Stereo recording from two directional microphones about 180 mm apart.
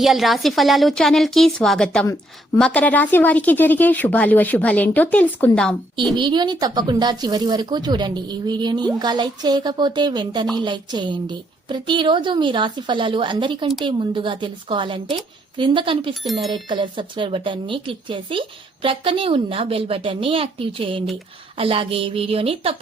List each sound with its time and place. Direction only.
0.0 s a woman's voice: centre (ahead or behind)
6.1 s speech: 25° right (ahead or behind)
16.2 s a woman's voice: centre (ahead or behind)
16.5 s speech: 25° right (ahead or behind)